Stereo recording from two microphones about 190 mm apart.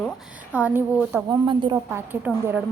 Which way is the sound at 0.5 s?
10° right (ahead or behind).